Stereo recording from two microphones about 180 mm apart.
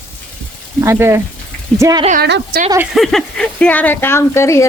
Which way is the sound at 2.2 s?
65° right (ahead or behind).